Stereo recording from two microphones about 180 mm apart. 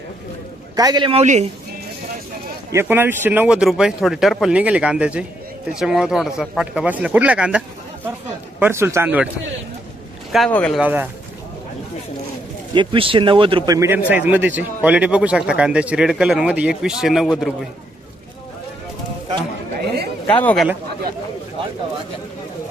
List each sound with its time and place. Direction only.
0.8 s speech: 20° right (ahead or behind)
1.2 s speech: 40° right (ahead or behind)
2.7 s speech: 10° right (ahead or behind)
10.3 s speech: 5° left (ahead or behind)
10.8 s speech: 10° right (ahead or behind)
12.7 s speech: 25° right (ahead or behind)
13.7 s speech: 15° right (ahead or behind)
20.2 s a man's voice: 10° left (ahead or behind)